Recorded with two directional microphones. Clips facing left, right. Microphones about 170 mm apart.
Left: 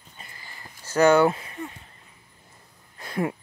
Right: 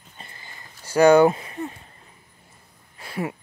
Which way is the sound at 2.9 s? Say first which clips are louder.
Left 2 dB; 10° right (ahead or behind).